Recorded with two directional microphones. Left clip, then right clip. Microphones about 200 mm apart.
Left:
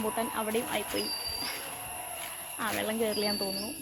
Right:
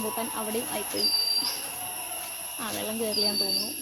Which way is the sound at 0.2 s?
5° right (ahead or behind).